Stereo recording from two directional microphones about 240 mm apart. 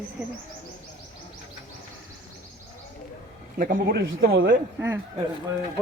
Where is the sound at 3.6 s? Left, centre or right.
Right.